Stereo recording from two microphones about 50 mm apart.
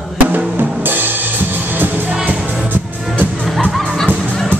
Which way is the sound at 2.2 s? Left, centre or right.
Right.